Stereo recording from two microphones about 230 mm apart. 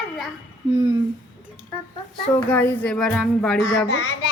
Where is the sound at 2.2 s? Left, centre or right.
Centre.